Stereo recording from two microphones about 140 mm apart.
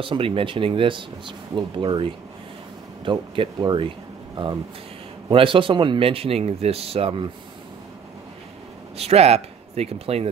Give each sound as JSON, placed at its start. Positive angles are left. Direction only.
{"t": 0.0, "sound": "speech", "side_deg": -40}
{"t": 8.9, "sound": "speech", "side_deg": -45}